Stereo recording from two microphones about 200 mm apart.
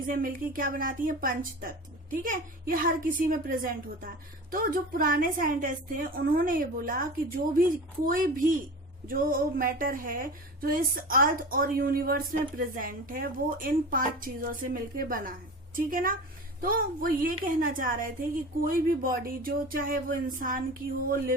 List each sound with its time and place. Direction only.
0.1 s speech: 45° right (ahead or behind)